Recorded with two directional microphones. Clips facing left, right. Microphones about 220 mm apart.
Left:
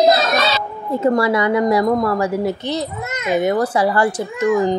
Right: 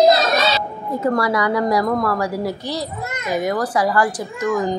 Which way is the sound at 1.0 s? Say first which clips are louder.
Left 3 dB; 25° left (ahead or behind).